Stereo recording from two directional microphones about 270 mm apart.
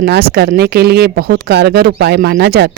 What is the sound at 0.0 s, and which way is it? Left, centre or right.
Speech, right.